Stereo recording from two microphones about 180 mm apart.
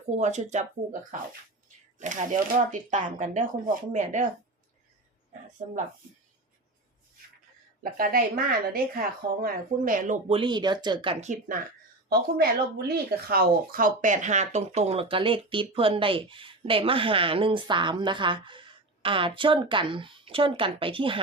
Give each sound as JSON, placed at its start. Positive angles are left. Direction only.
{"t": 0.2, "sound": "speech", "side_deg": -40}
{"t": 5.6, "sound": "speech", "side_deg": -35}
{"t": 7.9, "sound": "a woman's voice", "side_deg": -55}
{"t": 10.2, "sound": "speech", "side_deg": -30}
{"t": 12.0, "sound": "speech", "side_deg": -60}